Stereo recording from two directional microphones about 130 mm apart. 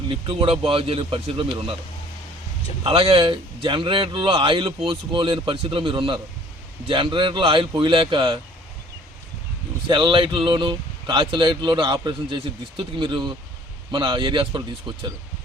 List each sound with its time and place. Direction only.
0.1 s a man's voice: 45° right (ahead or behind)
2.8 s speech: 45° right (ahead or behind)
9.9 s speech: 40° right (ahead or behind)